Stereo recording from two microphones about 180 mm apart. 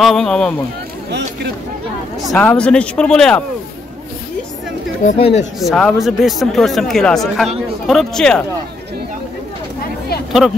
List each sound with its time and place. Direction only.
0.0 s speech: centre (ahead or behind)
2.3 s speech: 5° left (ahead or behind)
5.0 s speech: 40° left (ahead or behind)
5.6 s speech: centre (ahead or behind)